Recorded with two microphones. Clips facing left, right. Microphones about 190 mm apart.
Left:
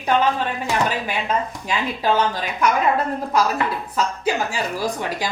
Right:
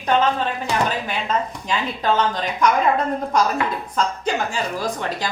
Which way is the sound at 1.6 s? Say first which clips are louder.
Left 2 dB; 10° left (ahead or behind).